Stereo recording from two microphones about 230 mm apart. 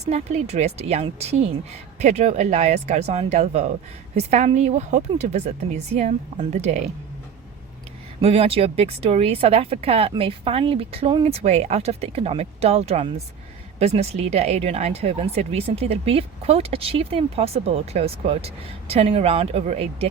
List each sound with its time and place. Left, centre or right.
0.0 s speech: right
8.2 s speech: right